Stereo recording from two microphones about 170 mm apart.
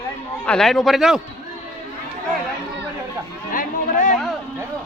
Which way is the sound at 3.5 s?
45° left (ahead or behind).